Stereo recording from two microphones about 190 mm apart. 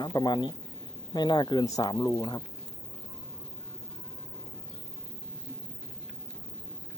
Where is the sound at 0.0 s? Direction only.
20° left (ahead or behind).